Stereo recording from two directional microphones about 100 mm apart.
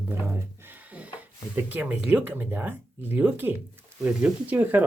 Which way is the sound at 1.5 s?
15° right (ahead or behind).